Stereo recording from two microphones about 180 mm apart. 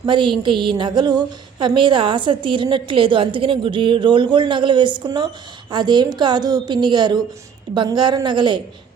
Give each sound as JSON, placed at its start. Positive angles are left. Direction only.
{"t": 0.0, "sound": "a woman's voice", "side_deg": -25}